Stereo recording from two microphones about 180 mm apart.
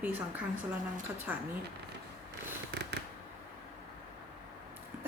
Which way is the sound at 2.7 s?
70° right (ahead or behind).